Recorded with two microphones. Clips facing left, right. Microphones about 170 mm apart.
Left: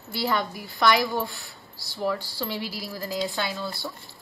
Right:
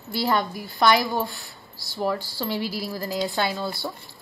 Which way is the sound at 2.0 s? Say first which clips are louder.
Right 2 dB; 40° right (ahead or behind).